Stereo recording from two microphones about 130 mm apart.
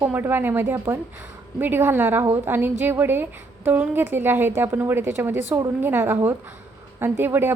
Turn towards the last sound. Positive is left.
turn(degrees=-15)  # may be behind; listen again after turning